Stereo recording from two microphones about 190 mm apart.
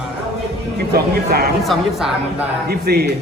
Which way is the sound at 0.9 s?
55° right (ahead or behind).